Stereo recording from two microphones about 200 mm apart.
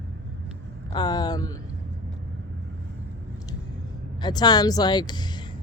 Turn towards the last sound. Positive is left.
turn(degrees=20)  # may be behind; listen again after turning